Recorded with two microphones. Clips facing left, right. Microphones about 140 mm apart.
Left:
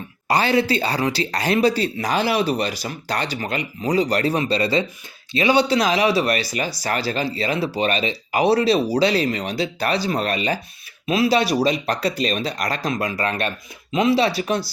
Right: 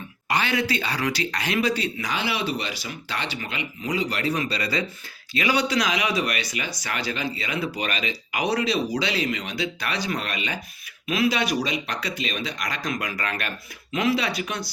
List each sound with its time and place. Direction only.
0.3 s speech: 35° left (ahead or behind)